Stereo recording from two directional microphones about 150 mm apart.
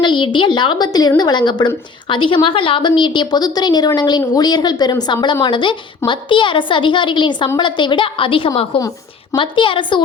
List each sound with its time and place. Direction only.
0.0 s a woman's voice: 30° left (ahead or behind)